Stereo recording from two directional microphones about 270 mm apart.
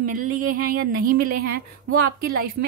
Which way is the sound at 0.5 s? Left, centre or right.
Right.